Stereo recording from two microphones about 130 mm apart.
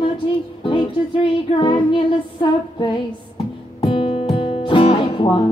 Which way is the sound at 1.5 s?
40° left (ahead or behind).